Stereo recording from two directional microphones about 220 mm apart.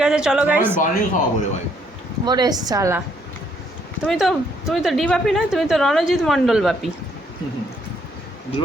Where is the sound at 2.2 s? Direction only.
20° right (ahead or behind).